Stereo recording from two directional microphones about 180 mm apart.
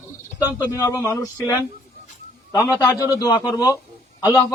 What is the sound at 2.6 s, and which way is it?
Speech, 15° left (ahead or behind).